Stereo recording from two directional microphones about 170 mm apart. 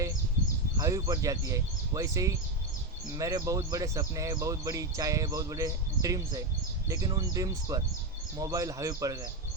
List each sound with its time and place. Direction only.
0.8 s speech: 20° right (ahead or behind)